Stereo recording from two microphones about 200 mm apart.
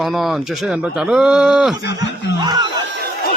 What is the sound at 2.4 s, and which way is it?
Speech, 20° right (ahead or behind).